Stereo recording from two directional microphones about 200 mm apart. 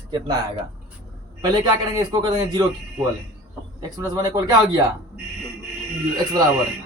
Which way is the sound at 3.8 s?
20° right (ahead or behind).